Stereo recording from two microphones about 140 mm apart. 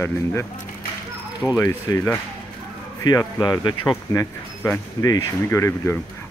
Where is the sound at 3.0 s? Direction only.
25° left (ahead or behind).